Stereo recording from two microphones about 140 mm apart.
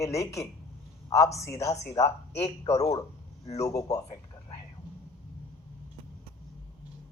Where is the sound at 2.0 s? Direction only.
50° left (ahead or behind).